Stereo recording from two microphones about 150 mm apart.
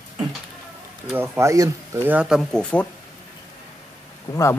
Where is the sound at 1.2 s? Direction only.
20° right (ahead or behind).